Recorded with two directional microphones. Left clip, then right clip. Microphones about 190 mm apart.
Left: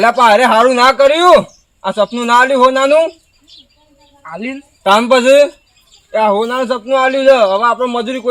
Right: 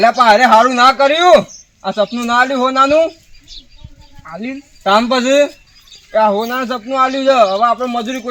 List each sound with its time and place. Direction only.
0.0 s speech: 35° left (ahead or behind)
4.3 s speech: 20° left (ahead or behind)
4.8 s speech: 35° left (ahead or behind)